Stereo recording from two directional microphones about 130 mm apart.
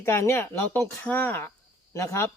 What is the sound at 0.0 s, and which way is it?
A man's voice, 20° left (ahead or behind).